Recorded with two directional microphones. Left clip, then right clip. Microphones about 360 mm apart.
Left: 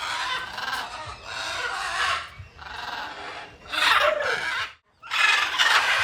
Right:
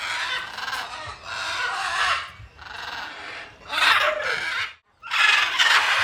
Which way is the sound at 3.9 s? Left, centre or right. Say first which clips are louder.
Even; centre.